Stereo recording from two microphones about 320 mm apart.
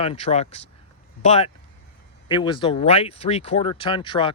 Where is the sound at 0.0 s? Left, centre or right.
Centre.